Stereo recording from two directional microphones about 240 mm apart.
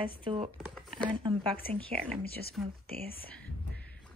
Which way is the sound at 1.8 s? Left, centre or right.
Centre.